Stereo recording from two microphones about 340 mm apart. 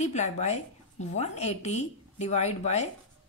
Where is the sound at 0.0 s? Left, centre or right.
Centre.